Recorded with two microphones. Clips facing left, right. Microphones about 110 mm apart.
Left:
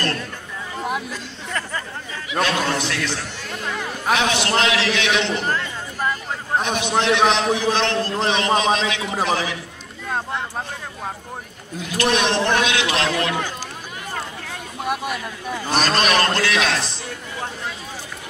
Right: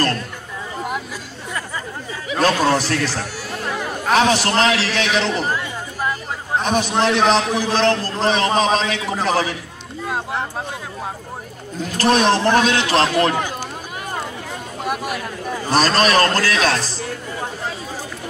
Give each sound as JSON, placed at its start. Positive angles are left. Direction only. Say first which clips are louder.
{"t": 2.4, "sound": "a sound", "louder": "right 6 dB", "side_deg": -35}
{"t": 3.6, "sound": "a sound", "louder": "right 2 dB", "side_deg": -5}
{"t": 4.1, "sound": "a man's voice", "louder": "right 4 dB", "side_deg": -40}
{"t": 5.4, "sound": "chatter", "louder": "right 1 dB", "side_deg": -10}
{"t": 6.6, "sound": "a man's voice", "louder": "right 5 dB", "side_deg": -40}
{"t": 11.8, "sound": "a man's voice", "louder": "right 4 dB", "side_deg": -35}
{"t": 14.9, "sound": "a man's voice", "louder": "right 1 dB", "side_deg": 0}
{"t": 15.7, "sound": "a man's voice", "louder": "right 3 dB", "side_deg": -40}